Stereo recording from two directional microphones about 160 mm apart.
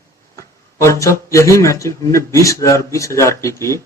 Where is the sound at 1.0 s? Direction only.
20° left (ahead or behind).